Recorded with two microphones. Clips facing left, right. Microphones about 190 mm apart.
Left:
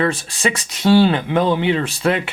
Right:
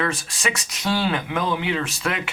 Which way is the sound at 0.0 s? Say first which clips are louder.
Left 6 dB; 30° left (ahead or behind).